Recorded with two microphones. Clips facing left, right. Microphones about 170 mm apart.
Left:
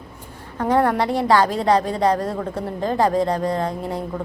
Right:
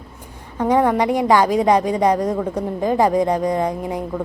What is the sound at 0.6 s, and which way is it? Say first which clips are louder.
A woman's voice: right 2 dB; 15° right (ahead or behind).